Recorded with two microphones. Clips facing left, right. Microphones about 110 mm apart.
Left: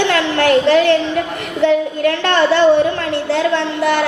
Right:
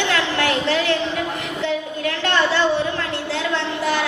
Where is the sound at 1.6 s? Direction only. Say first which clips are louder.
Left 11 dB; 55° left (ahead or behind).